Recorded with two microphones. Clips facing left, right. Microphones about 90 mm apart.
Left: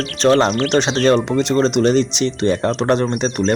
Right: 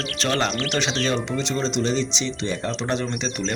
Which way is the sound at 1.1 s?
50° left (ahead or behind).